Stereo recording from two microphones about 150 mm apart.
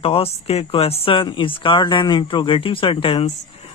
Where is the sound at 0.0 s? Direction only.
40° left (ahead or behind).